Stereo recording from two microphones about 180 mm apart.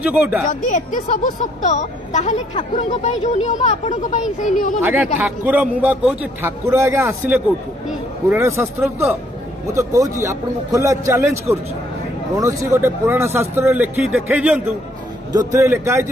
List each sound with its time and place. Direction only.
0.0 s a man's voice: 10° right (ahead or behind)
0.5 s speech: 45° left (ahead or behind)
5.2 s a man's voice: 10° right (ahead or behind)
10.2 s a man's voice: 15° right (ahead or behind)